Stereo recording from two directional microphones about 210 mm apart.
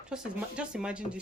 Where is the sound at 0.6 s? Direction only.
5° right (ahead or behind).